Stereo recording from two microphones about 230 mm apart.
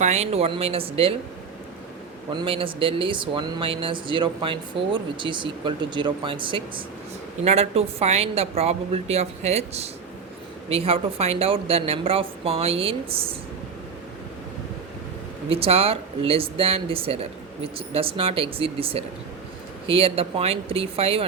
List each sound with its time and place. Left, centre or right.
0.0 s speech: right
2.3 s speech: right
15.4 s speech: right